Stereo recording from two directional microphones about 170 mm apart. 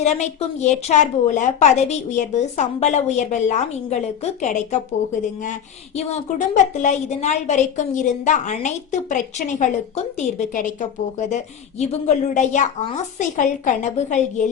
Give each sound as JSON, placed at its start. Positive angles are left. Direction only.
{"t": 0.0, "sound": "a woman's voice", "side_deg": 40}
{"t": 6.0, "sound": "a woman's voice", "side_deg": 45}